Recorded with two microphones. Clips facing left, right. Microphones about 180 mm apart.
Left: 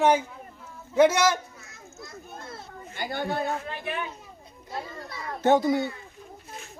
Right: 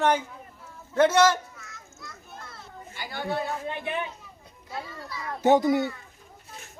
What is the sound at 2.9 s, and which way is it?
Speech, 50° left (ahead or behind).